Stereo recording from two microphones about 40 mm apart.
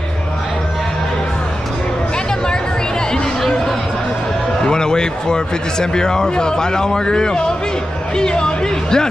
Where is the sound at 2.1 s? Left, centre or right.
Centre.